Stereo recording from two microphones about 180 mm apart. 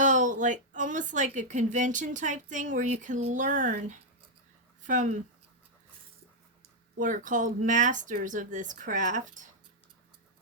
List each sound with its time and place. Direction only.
0.0 s speech: 45° right (ahead or behind)
6.9 s speech: 45° right (ahead or behind)